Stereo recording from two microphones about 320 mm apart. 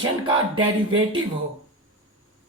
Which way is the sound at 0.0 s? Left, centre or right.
Centre.